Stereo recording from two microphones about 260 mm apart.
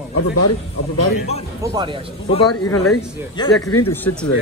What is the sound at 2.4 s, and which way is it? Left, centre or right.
Speech, left.